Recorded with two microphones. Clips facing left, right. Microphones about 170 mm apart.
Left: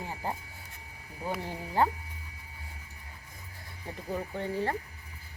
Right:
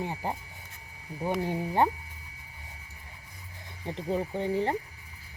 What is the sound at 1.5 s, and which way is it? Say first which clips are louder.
Speech: right 1 dB; 20° right (ahead or behind).